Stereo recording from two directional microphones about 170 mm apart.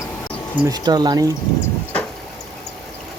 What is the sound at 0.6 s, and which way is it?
Speech, 25° right (ahead or behind).